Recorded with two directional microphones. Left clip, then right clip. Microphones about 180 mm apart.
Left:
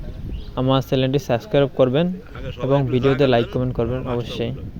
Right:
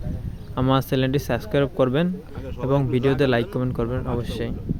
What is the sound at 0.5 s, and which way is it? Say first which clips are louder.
Speech: left 2 dB; centre (ahead or behind).